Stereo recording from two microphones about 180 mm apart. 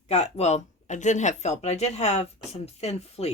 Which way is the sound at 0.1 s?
35° left (ahead or behind).